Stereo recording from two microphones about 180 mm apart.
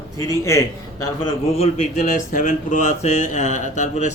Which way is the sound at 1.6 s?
40° left (ahead or behind).